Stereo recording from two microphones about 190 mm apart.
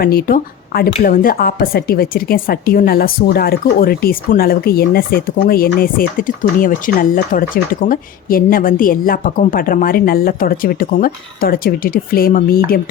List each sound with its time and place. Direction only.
0.0 s a woman's voice: 50° left (ahead or behind)